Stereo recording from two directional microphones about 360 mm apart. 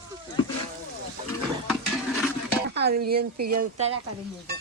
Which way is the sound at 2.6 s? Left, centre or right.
Right.